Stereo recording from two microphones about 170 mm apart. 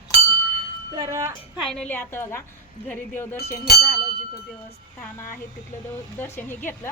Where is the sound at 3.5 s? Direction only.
70° left (ahead or behind).